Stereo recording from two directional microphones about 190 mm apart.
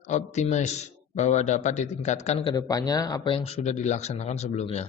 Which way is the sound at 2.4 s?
20° left (ahead or behind).